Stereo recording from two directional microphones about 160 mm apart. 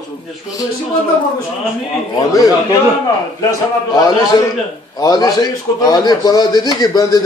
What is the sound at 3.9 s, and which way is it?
A man's voice, 25° left (ahead or behind).